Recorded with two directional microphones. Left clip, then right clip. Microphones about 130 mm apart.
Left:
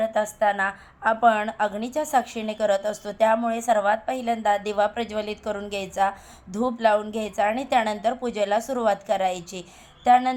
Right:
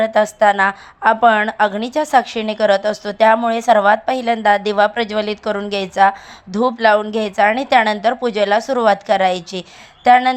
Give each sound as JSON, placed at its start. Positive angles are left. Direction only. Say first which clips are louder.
{"t": 0.2, "sound": "a woman's voice", "louder": "right 11 dB", "side_deg": -40}
{"t": 3.6, "sound": "a woman's voice", "louder": "right 9 dB", "side_deg": -40}